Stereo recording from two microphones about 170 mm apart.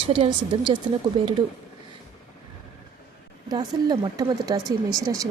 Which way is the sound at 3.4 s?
25° right (ahead or behind).